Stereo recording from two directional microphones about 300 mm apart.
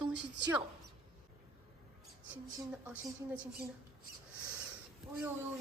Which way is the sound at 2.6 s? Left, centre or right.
Centre.